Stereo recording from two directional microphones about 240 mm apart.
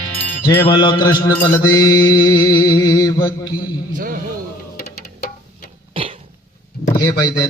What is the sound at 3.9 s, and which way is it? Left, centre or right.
Speech, right.